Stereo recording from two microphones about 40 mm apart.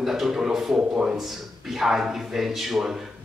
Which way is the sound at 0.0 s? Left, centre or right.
Centre.